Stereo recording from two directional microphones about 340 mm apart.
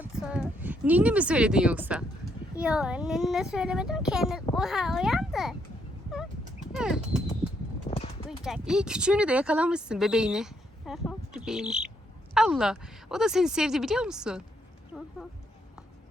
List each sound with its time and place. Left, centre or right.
0.0 s speech: centre
6.7 s speech: centre
7.9 s clip-clop: centre
8.3 s speech: centre